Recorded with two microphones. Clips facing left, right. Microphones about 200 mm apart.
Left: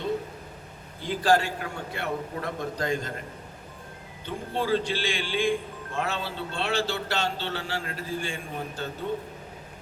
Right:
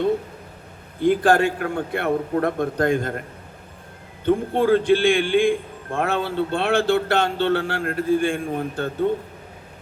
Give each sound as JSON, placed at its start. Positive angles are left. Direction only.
{"t": 0.9, "sound": "a man's voice", "side_deg": -55}
{"t": 4.3, "sound": "a man's voice", "side_deg": -55}